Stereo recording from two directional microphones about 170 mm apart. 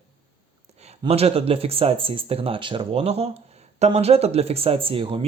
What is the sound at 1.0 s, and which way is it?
Speech, 35° right (ahead or behind).